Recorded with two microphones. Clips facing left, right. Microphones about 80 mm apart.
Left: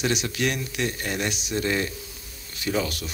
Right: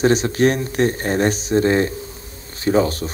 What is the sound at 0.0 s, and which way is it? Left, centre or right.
Speech, right.